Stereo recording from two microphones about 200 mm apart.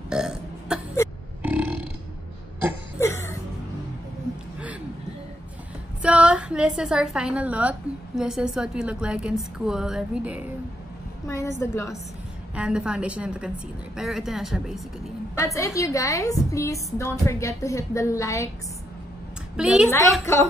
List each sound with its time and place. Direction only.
0.1 s burping: 5° right (ahead or behind)
3.0 s music: 15° left (ahead or behind)
6.0 s a woman's voice: 5° right (ahead or behind)
11.2 s a woman's voice: 15° left (ahead or behind)
12.5 s a woman's voice: 5° right (ahead or behind)
15.3 s a woman's voice: 15° left (ahead or behind)
19.5 s a woman's voice: 5° right (ahead or behind)
19.9 s a woman's voice: 15° left (ahead or behind)